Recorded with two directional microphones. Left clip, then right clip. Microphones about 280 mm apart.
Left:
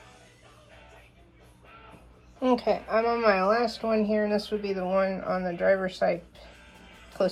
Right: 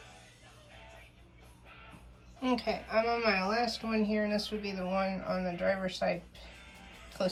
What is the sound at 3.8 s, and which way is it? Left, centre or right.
Speech, centre.